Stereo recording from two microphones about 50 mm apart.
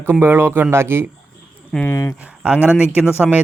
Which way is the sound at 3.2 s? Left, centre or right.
Centre.